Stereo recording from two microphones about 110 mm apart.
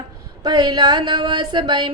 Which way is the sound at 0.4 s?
40° right (ahead or behind).